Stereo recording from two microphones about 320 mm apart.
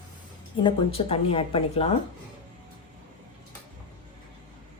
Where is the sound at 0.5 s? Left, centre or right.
Centre.